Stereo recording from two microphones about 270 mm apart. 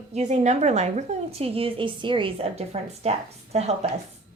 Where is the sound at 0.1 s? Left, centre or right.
Right.